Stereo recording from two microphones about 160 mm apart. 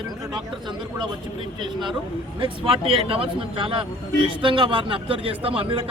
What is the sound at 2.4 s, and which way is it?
A man's voice, 35° right (ahead or behind).